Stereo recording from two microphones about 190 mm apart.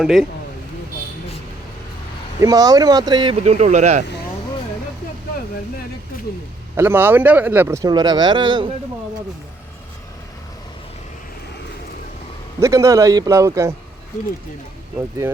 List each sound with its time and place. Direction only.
0.0 s speech: centre (ahead or behind)
2.4 s speech: 20° right (ahead or behind)
3.4 s speech: 40° right (ahead or behind)
6.7 s speech: 10° right (ahead or behind)
12.5 s speech: 15° right (ahead or behind)